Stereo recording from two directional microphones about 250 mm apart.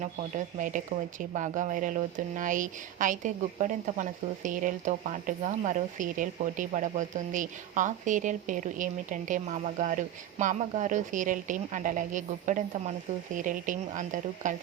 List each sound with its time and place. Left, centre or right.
0.0 s speech: right